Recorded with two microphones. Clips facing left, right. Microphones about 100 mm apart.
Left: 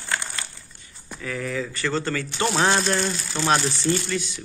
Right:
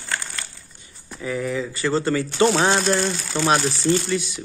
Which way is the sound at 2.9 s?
15° right (ahead or behind).